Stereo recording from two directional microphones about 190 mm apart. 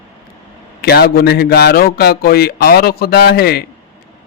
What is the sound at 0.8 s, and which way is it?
A man's voice, 55° left (ahead or behind).